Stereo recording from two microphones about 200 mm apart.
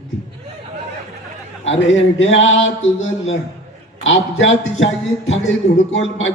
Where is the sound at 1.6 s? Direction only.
70° left (ahead or behind).